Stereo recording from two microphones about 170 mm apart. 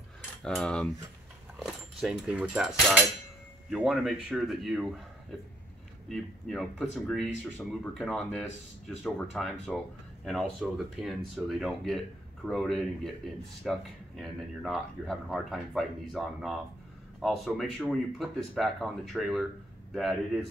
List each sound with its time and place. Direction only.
0.4 s speech: 5° left (ahead or behind)
6.0 s speech: centre (ahead or behind)